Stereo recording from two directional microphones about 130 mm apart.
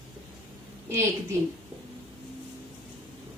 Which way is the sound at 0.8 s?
20° right (ahead or behind).